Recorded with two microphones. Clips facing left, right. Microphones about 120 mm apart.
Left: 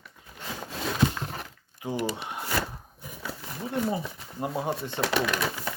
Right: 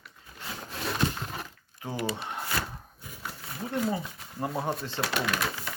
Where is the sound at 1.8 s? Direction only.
15° left (ahead or behind).